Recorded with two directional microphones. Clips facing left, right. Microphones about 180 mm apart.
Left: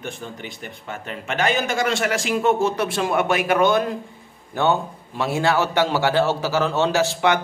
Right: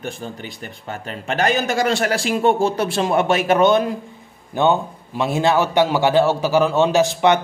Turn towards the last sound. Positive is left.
turn(degrees=-20)  # may be behind; listen again after turning